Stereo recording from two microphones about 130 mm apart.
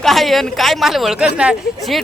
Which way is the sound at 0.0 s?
Centre (ahead or behind).